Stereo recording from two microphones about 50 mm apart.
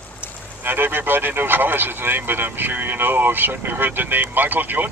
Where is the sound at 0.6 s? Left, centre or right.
Right.